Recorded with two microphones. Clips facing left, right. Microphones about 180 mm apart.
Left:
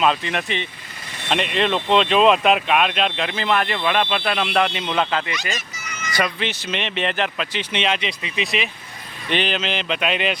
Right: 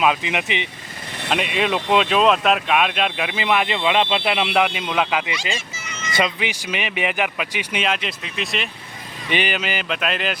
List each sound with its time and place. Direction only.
0.0 s speech: 10° right (ahead or behind)
1.3 s speech: 5° right (ahead or behind)
5.5 s a sound: 25° right (ahead or behind)
6.4 s speech: 10° right (ahead or behind)